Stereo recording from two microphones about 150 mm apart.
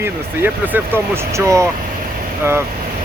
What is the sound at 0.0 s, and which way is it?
Speech, 15° right (ahead or behind).